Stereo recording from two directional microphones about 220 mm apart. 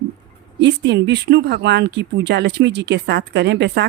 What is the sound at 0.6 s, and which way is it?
Speech, 50° right (ahead or behind).